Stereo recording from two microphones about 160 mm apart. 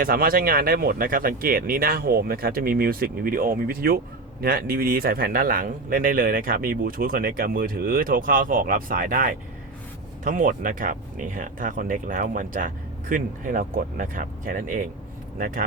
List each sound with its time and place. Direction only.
0.0 s speech: 65° right (ahead or behind)